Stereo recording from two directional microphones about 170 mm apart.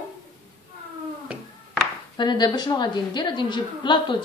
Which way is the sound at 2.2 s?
25° left (ahead or behind).